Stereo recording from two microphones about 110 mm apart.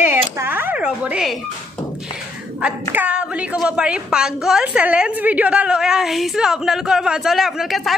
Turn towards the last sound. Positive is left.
turn(degrees=0)  # may be behind; listen again after turning